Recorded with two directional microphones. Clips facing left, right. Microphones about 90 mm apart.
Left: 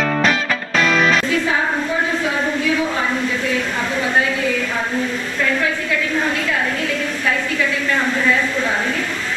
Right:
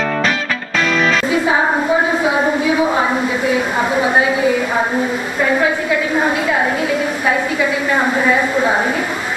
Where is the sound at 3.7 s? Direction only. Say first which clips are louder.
Right 6 dB; 40° right (ahead or behind).